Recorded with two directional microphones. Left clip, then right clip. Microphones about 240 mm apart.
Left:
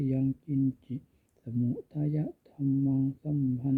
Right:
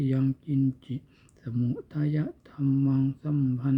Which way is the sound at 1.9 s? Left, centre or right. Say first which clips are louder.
Right 3 dB; centre.